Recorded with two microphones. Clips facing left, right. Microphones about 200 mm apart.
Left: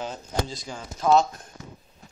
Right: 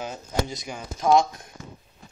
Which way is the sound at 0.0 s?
15° right (ahead or behind).